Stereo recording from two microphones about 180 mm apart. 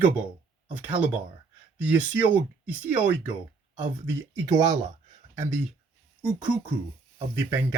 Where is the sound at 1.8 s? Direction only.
10° right (ahead or behind).